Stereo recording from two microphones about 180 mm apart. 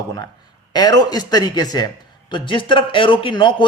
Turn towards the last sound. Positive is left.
turn(degrees=25)  # may be behind; listen again after turning